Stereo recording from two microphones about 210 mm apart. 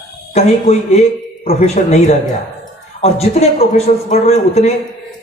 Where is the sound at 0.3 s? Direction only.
30° left (ahead or behind).